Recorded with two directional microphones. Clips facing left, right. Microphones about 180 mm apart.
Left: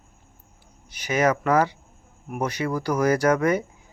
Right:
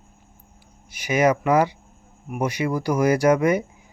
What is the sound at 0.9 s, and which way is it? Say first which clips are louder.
A man's voice: right 2 dB; 10° right (ahead or behind).